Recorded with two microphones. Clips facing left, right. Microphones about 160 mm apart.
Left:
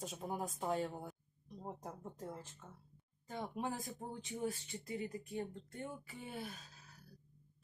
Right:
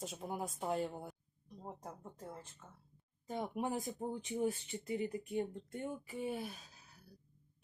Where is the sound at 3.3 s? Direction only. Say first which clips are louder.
Right 3 dB; 20° right (ahead or behind).